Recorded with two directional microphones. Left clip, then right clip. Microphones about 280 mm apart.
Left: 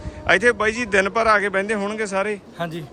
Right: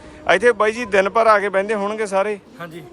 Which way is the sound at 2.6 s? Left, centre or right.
Left.